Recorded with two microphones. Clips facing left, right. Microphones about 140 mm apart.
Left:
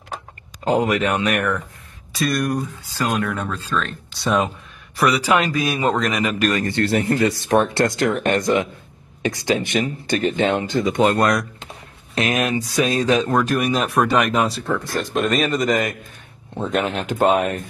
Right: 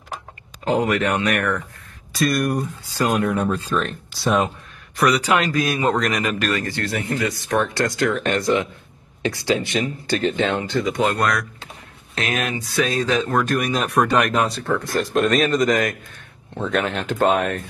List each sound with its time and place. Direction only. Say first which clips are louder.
0.7 s speech: left 1 dB; 10° left (ahead or behind)
2.1 s speech: right 1 dB; centre (ahead or behind)
3.0 s speech: right 3 dB; 10° right (ahead or behind)
4.1 s speech: even; centre (ahead or behind)
6.6 s speech: left 6 dB; 25° left (ahead or behind)
8.3 s speech: left 1 dB; 45° left (ahead or behind)
10.3 s speech: left 2 dB; 20° left (ahead or behind)
12.4 s speech: left 4 dB; 40° left (ahead or behind)
12.7 s speech: left 2 dB; 15° left (ahead or behind)
13.5 s speech: left 2 dB; 5° left (ahead or behind)